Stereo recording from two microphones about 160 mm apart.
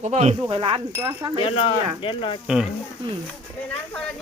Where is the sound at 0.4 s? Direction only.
30° right (ahead or behind).